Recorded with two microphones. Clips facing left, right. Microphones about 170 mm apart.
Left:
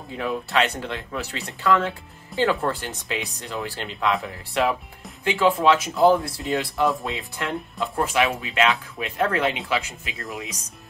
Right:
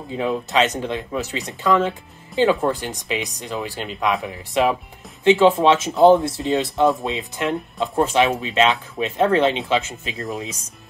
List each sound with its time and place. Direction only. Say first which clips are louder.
0.1 s speech: right 3 dB; 20° right (ahead or behind)